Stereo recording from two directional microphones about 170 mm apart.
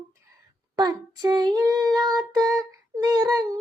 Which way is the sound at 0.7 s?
25° right (ahead or behind).